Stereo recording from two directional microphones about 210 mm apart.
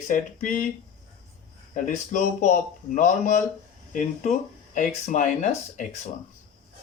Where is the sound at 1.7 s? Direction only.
35° left (ahead or behind).